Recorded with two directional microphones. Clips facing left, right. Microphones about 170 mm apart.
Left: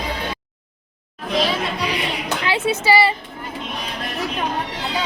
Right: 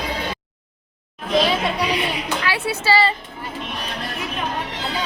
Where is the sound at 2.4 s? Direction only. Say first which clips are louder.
Left 4 dB; 20° left (ahead or behind).